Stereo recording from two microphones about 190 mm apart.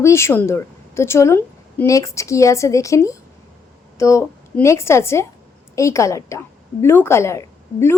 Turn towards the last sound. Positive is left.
turn(degrees=15)  # may be behind; listen again after turning